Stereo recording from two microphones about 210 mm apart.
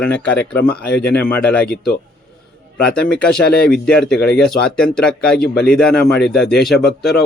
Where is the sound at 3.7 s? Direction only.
5° left (ahead or behind).